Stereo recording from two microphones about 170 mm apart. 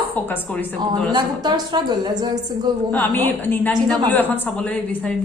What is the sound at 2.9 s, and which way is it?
A woman's voice, 10° left (ahead or behind).